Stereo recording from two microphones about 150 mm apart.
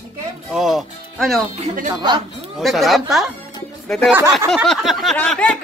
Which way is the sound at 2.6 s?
Centre (ahead or behind).